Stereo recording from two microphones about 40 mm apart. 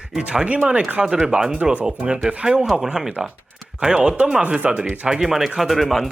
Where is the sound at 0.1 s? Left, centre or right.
Right.